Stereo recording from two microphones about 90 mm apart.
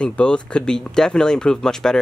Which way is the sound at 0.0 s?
10° left (ahead or behind).